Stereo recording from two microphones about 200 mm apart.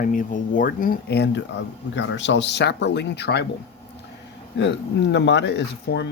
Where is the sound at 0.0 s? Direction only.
40° left (ahead or behind).